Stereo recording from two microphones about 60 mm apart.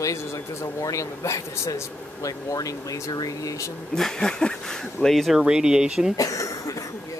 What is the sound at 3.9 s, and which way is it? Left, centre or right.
Speech, centre.